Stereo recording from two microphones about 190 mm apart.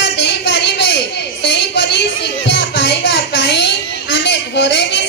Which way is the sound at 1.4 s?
65° left (ahead or behind).